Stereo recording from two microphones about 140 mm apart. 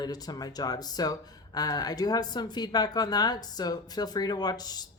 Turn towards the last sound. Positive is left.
turn(degrees=30)  # may be behind; listen again after turning